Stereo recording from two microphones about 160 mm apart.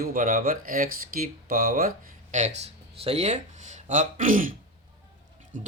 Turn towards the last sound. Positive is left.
turn(degrees=-55)  # may be behind; listen again after turning